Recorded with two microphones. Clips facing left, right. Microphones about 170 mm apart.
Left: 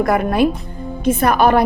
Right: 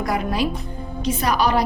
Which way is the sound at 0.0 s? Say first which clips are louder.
Left 7 dB; 55° left (ahead or behind).